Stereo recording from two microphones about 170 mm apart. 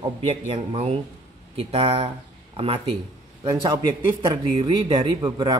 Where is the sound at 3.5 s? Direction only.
20° right (ahead or behind).